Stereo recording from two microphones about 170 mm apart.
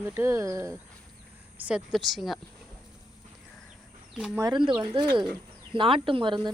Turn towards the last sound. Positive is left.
turn(degrees=-30)  # may be behind; listen again after turning